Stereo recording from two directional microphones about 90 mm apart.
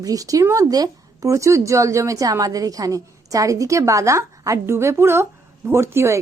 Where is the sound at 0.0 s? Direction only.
40° right (ahead or behind).